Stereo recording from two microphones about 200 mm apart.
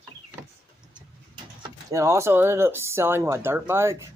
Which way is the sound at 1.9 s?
15° right (ahead or behind).